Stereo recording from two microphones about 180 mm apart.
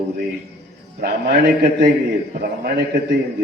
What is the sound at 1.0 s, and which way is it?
Speech, 60° right (ahead or behind).